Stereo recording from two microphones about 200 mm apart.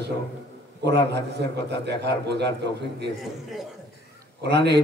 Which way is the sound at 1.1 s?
55° right (ahead or behind).